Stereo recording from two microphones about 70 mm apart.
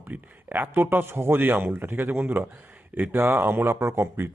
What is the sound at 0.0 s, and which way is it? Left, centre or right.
Speech, right.